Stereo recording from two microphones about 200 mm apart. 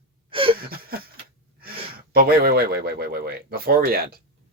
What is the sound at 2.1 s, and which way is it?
Speech, 50° right (ahead or behind).